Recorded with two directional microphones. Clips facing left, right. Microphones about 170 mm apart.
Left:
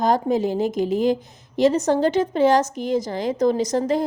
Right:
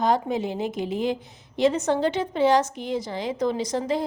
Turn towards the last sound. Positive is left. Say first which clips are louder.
# left 5 dB
turn(degrees=45)  # may be behind; listen again after turning